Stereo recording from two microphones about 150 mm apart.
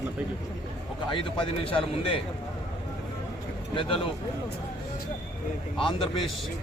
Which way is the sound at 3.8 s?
35° left (ahead or behind).